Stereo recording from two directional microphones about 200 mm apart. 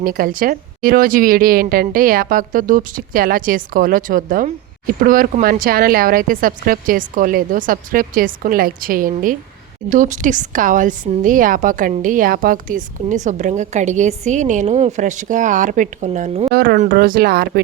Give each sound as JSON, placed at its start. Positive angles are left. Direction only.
{"t": 0.0, "sound": "a woman's voice", "side_deg": -45}
{"t": 16.6, "sound": "a woman's voice", "side_deg": -50}